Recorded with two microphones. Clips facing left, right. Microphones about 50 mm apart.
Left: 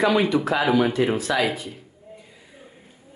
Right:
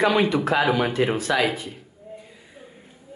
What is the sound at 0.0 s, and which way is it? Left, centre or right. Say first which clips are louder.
Speech: even; right.